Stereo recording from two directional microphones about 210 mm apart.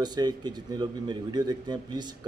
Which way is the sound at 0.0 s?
20° right (ahead or behind).